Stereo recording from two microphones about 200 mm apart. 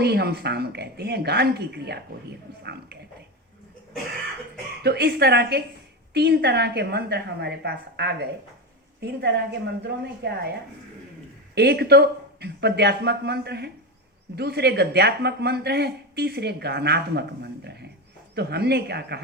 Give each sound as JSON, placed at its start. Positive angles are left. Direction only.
{"t": 0.0, "sound": "speech", "side_deg": -55}
{"t": 4.8, "sound": "speech", "side_deg": -55}
{"t": 11.5, "sound": "speech", "side_deg": -55}